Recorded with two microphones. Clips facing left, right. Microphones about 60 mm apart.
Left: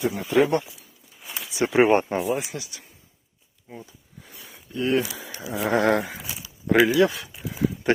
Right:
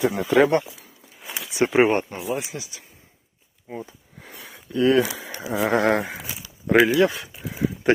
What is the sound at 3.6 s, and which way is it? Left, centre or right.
Sniff, right.